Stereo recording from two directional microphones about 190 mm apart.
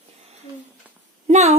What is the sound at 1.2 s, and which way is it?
Speech, 35° right (ahead or behind).